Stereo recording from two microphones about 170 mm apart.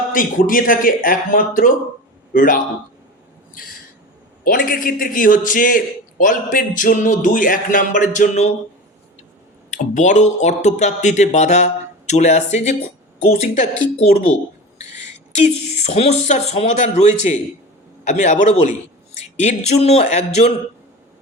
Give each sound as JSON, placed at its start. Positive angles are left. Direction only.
{"t": 0.1, "sound": "a man's voice", "side_deg": 55}
{"t": 3.5, "sound": "a sound", "side_deg": 60}
{"t": 4.4, "sound": "a man's voice", "side_deg": 55}
{"t": 9.6, "sound": "a man's voice", "side_deg": 45}